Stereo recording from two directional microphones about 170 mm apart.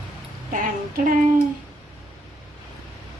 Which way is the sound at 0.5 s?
50° right (ahead or behind).